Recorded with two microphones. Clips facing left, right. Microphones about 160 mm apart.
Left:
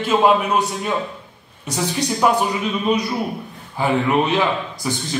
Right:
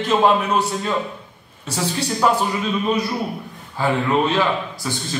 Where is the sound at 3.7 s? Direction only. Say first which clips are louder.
Left 1 dB; 15° left (ahead or behind).